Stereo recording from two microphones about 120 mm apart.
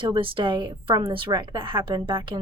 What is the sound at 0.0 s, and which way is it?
A woman's voice, 45° right (ahead or behind).